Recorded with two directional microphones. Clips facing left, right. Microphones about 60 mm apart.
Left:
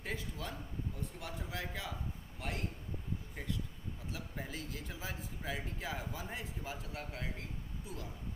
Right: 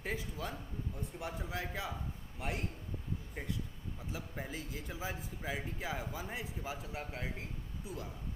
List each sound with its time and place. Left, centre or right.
0.0 s a sound: centre
1.2 s a man's voice: centre
4.1 s a man's voice: centre
7.0 s a man's voice: right